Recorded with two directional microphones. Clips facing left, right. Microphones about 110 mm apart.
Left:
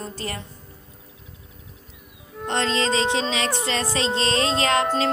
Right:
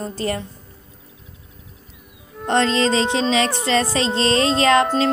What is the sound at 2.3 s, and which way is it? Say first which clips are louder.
Music: right 5 dB; centre (ahead or behind).